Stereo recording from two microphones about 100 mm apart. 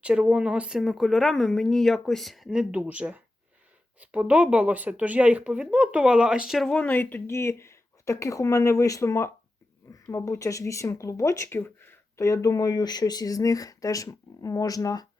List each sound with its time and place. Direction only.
0.0 s speech: 10° right (ahead or behind)
6.7 s speech: 15° left (ahead or behind)
12.2 s speech: 35° left (ahead or behind)